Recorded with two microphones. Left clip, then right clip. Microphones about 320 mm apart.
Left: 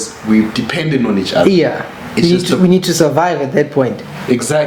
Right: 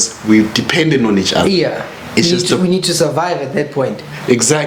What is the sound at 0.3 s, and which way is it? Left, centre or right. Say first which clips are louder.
Speech: right 2 dB; right.